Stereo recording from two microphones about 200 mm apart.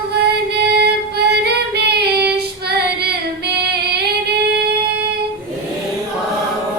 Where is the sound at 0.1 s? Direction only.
55° right (ahead or behind).